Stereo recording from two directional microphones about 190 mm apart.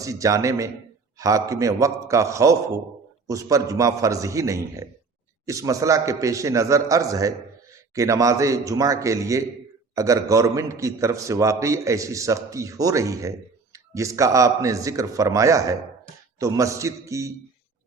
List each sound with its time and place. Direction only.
0.0 s a man's voice: 15° right (ahead or behind)